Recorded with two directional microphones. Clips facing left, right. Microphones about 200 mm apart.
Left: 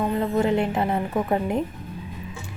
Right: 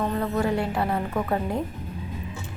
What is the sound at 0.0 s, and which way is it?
A woman's voice, 20° left (ahead or behind).